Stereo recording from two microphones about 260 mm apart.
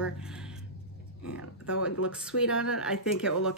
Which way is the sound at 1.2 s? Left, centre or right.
Left.